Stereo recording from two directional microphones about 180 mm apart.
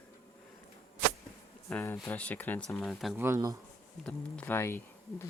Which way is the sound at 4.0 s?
5° left (ahead or behind).